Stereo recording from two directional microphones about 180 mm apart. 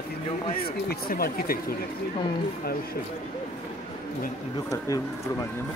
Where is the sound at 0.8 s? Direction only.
55° left (ahead or behind).